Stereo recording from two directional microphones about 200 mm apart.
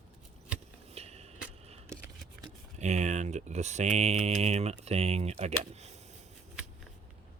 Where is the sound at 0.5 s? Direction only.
30° right (ahead or behind).